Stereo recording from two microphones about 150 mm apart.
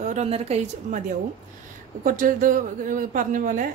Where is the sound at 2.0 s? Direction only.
60° right (ahead or behind).